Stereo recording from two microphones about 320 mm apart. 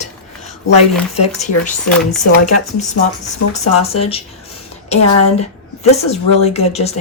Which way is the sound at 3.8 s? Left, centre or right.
Centre.